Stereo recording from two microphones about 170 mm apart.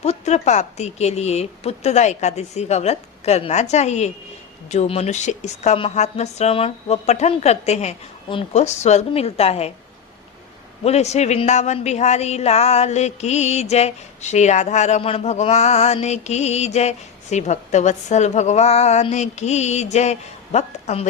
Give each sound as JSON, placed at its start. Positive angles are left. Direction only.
{"t": 0.0, "sound": "a woman's voice", "side_deg": 40}
{"t": 10.8, "sound": "a woman's voice", "side_deg": 40}